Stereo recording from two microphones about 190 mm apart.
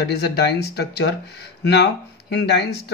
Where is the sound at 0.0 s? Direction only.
60° left (ahead or behind).